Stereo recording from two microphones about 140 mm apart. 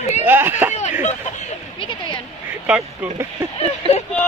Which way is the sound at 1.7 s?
35° left (ahead or behind).